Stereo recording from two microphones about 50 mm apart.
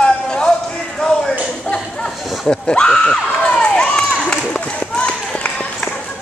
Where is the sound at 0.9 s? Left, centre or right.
Centre.